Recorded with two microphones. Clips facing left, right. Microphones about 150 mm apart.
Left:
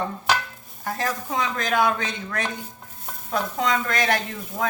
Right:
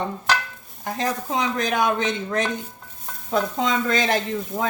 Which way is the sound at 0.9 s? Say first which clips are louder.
Right 2 dB; 20° right (ahead or behind).